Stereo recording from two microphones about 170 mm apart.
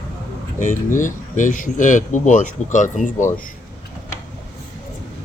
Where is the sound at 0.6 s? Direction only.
50° left (ahead or behind).